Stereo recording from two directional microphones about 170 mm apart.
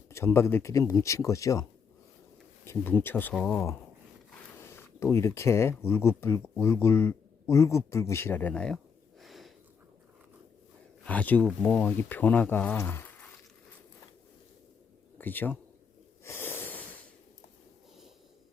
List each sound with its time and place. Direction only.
0.1 s speech: 15° left (ahead or behind)
2.6 s speech: 10° left (ahead or behind)
5.1 s speech: 15° left (ahead or behind)
9.2 s a sound: centre (ahead or behind)
11.0 s speech: 10° left (ahead or behind)
15.2 s speech: 10° left (ahead or behind)
16.2 s wheeze: 15° left (ahead or behind)